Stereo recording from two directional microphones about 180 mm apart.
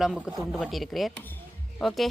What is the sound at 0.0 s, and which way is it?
A woman's voice, 5° right (ahead or behind).